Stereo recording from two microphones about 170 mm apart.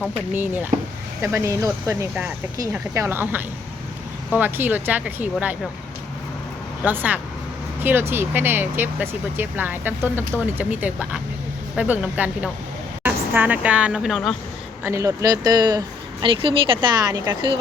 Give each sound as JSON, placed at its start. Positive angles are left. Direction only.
{"t": 0.3, "sound": "speech", "side_deg": -10}
{"t": 6.8, "sound": "speech", "side_deg": -10}
{"t": 14.8, "sound": "speech", "side_deg": -15}